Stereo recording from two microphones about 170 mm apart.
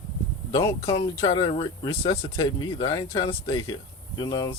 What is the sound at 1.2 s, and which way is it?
Speech, 25° left (ahead or behind).